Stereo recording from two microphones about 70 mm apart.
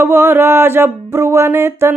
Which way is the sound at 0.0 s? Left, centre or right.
Right.